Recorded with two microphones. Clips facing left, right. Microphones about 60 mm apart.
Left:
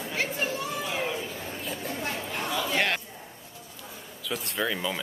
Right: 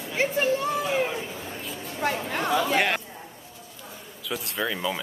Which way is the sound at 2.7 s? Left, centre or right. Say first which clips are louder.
Right 3 dB; centre.